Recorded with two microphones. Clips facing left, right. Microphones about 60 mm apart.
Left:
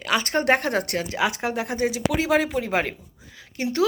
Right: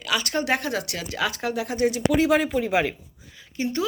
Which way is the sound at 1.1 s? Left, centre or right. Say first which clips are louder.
Even; left.